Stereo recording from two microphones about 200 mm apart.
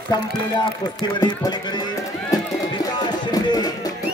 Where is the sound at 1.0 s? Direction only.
20° left (ahead or behind).